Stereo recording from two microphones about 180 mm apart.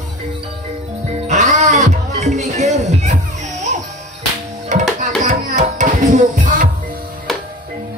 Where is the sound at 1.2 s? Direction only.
40° right (ahead or behind).